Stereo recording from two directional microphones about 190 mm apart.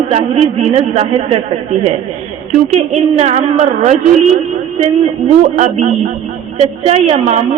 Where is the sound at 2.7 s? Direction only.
35° right (ahead or behind).